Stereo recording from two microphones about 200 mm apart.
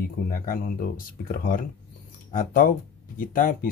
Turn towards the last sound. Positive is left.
turn(degrees=45)  # may be behind; listen again after turning